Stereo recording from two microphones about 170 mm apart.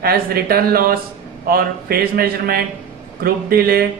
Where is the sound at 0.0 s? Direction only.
65° right (ahead or behind).